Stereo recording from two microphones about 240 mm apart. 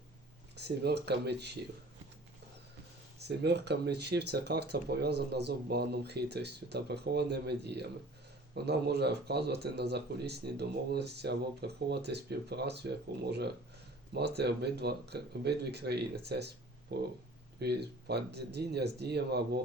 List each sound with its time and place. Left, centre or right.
0.5 s speech: right
3.2 s speech: right